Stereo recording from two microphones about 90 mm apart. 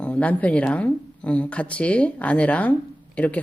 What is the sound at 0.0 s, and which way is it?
Speech, 15° left (ahead or behind).